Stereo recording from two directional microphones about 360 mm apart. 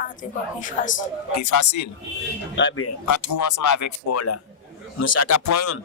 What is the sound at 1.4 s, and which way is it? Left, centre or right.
Speech, left.